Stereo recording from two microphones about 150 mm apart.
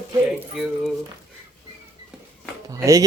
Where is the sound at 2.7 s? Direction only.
20° right (ahead or behind).